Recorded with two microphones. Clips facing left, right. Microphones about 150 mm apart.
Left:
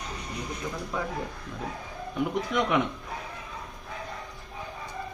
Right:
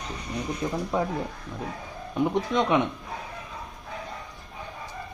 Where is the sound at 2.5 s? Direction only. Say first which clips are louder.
Right 3 dB; 25° right (ahead or behind).